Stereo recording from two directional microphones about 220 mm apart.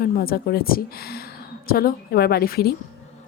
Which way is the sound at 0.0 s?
40° left (ahead or behind).